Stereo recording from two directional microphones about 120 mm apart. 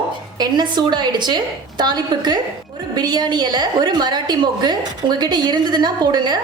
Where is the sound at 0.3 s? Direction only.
40° right (ahead or behind).